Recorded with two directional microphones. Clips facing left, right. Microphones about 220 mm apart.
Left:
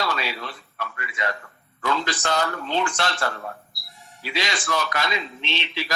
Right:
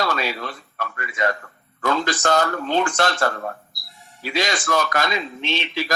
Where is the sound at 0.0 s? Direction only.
45° right (ahead or behind).